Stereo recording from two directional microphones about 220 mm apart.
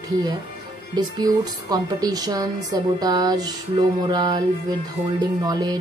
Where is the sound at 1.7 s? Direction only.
15° right (ahead or behind).